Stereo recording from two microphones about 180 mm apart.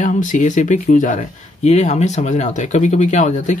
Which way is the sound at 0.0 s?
45° left (ahead or behind).